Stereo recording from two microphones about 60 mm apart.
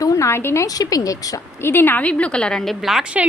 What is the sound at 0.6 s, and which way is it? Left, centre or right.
Speech, left.